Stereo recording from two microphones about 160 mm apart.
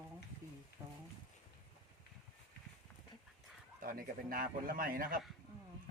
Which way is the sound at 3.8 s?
65° right (ahead or behind).